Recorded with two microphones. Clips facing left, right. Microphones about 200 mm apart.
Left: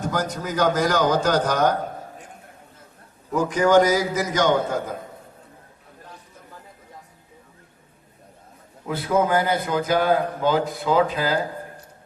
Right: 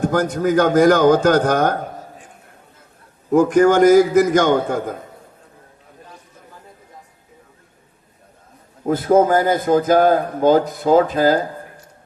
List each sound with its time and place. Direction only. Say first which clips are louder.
0.0 s a man's voice: right 8 dB; 50° right (ahead or behind)
3.3 s a man's voice: right 5 dB; 50° right (ahead or behind)
8.8 s a man's voice: right 7 dB; 45° right (ahead or behind)